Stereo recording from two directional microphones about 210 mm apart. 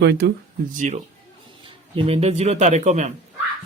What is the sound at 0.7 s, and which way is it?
Speech, 35° right (ahead or behind).